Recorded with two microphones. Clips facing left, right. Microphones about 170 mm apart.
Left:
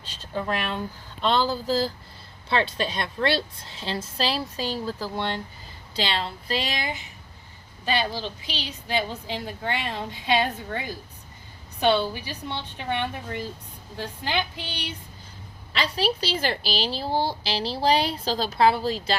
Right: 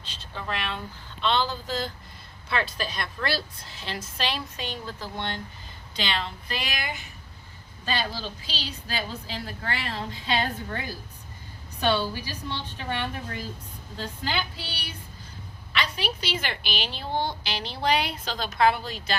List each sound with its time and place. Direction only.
0.0 s a sound: 40° left (ahead or behind)
1.2 s a woman's voice: 40° left (ahead or behind); by 14.9 s 20° left (ahead or behind)
15.7 s a woman's voice: 30° left (ahead or behind)